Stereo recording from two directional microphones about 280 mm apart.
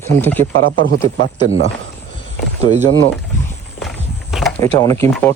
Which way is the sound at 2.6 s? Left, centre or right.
Right.